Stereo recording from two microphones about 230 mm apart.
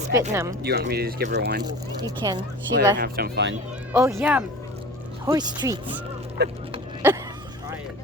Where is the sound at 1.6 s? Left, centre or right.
Centre.